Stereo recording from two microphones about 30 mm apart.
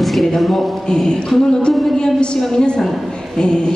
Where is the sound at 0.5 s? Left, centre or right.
Centre.